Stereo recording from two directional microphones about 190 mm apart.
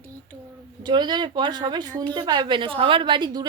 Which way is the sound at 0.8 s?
25° right (ahead or behind).